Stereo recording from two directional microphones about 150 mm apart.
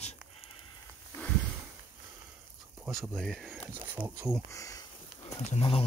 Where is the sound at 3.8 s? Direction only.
15° right (ahead or behind).